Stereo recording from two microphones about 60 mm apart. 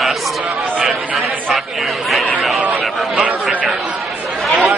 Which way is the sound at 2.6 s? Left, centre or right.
Right.